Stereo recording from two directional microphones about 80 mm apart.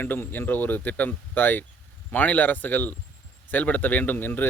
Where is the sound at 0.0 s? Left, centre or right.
Left.